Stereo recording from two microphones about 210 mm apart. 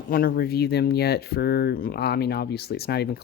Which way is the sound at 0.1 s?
45° left (ahead or behind).